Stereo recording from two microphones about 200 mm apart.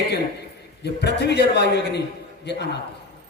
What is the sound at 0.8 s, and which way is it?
A man's voice, 55° left (ahead or behind).